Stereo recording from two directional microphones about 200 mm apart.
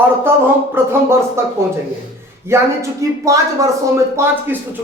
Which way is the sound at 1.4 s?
15° right (ahead or behind).